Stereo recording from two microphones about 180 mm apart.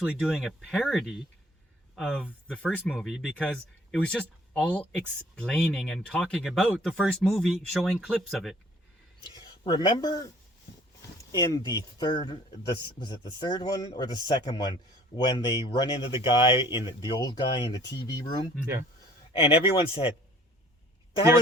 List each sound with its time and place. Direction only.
0.0 s speech: centre (ahead or behind)
9.2 s speech: 25° left (ahead or behind)
11.3 s speech: 20° left (ahead or behind)